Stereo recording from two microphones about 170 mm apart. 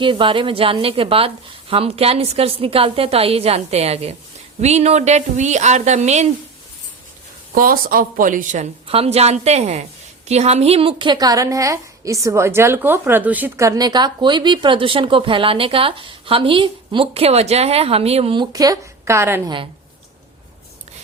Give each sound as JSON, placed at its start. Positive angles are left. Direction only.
{"t": 0.0, "sound": "a woman's voice", "side_deg": -30}
{"t": 7.5, "sound": "speech", "side_deg": -55}
{"t": 8.9, "sound": "a woman's voice", "side_deg": -35}
{"t": 18.5, "sound": "a woman's voice", "side_deg": -20}